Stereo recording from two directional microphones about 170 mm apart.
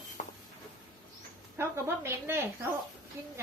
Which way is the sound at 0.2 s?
45° left (ahead or behind).